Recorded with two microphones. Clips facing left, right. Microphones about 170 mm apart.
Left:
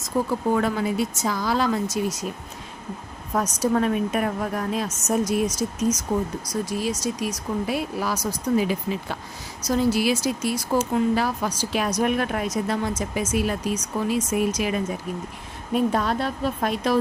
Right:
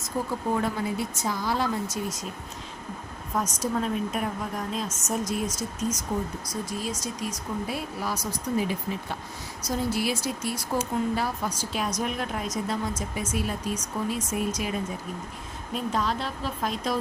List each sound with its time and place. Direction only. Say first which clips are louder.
0.1 s a woman's voice: left 6 dB; 70° left (ahead or behind)
0.5 s speech: left 4 dB; 90° left
3.3 s a woman's voice: left 6 dB; 70° left (ahead or behind)
15.7 s a woman's voice: left 6 dB; 60° left (ahead or behind)